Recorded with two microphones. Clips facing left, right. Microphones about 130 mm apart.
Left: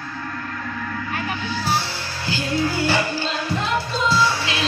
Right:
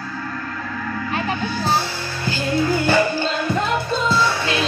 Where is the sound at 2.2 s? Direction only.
50° right (ahead or behind).